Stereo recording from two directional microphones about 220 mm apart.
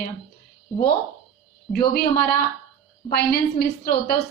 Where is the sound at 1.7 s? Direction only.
45° left (ahead or behind).